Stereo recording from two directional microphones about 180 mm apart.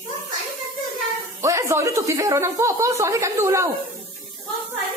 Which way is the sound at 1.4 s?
15° right (ahead or behind).